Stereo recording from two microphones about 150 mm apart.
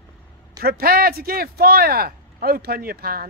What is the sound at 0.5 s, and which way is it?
Speech, 90° right.